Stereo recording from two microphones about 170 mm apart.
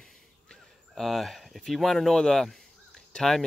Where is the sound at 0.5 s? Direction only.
Centre (ahead or behind).